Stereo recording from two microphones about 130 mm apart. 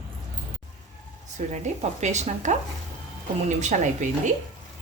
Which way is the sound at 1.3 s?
65° right (ahead or behind).